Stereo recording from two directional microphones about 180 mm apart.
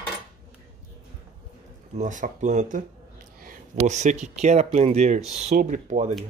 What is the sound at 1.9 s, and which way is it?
Speech, 45° right (ahead or behind).